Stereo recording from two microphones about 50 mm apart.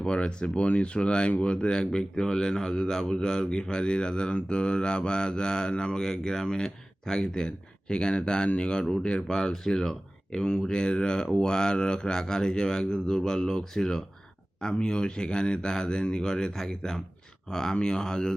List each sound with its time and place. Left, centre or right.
0.0 s speech: centre